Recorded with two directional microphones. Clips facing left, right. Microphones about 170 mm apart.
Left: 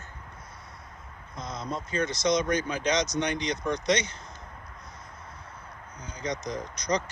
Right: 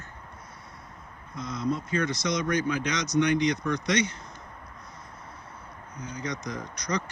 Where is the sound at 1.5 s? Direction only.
60° right (ahead or behind).